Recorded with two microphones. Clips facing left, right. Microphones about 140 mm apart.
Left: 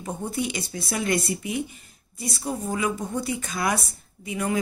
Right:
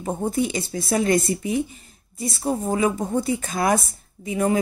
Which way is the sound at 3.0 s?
45° right (ahead or behind).